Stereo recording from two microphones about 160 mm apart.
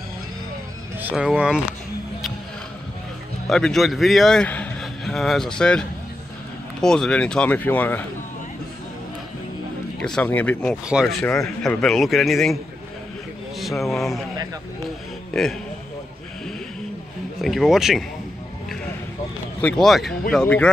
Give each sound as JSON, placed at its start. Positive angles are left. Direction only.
{"t": 1.0, "sound": "speech", "side_deg": -5}
{"t": 3.4, "sound": "a man's voice", "side_deg": 5}
{"t": 9.9, "sound": "speech", "side_deg": 5}
{"t": 10.9, "sound": "speech", "side_deg": 0}
{"t": 13.6, "sound": "speech", "side_deg": 0}
{"t": 17.4, "sound": "speech", "side_deg": 0}
{"t": 19.6, "sound": "speech", "side_deg": 0}